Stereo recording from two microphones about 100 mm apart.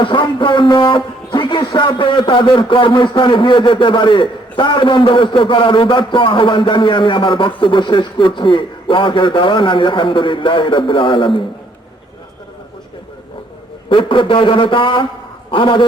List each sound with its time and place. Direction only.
0.0 s speech: 55° left (ahead or behind)
13.9 s a man's voice: 55° left (ahead or behind)